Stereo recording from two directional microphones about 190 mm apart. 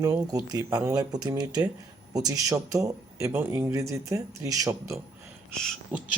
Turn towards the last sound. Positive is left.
turn(degrees=5)  # may be behind; listen again after turning